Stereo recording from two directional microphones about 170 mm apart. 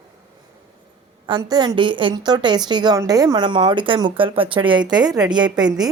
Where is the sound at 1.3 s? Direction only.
25° right (ahead or behind).